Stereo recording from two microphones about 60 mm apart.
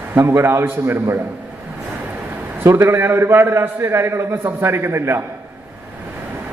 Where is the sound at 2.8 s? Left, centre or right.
Right.